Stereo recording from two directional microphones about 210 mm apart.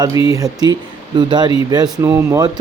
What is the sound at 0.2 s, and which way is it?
Speech, 20° left (ahead or behind).